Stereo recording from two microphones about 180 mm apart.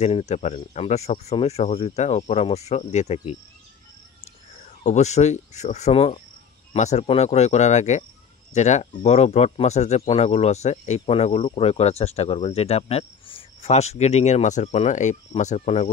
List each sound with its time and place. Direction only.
0.0 s speech: 35° left (ahead or behind)
4.8 s speech: 40° left (ahead or behind)